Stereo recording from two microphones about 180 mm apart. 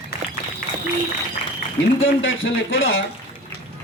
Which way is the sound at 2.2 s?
90° left.